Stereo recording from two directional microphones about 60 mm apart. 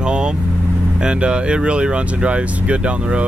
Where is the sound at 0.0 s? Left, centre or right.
Centre.